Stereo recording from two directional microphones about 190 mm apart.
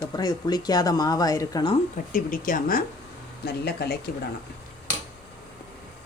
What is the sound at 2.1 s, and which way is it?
Speech, 45° left (ahead or behind).